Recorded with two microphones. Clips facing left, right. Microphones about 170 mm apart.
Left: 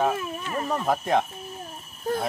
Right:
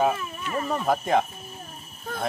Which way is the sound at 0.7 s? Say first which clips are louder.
Right 1 dB; centre (ahead or behind).